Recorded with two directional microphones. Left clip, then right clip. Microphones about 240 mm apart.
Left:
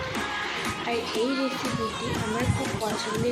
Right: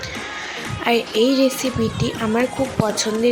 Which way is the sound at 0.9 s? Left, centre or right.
Right.